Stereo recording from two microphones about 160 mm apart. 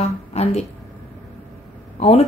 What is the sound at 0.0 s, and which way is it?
Music, 40° left (ahead or behind).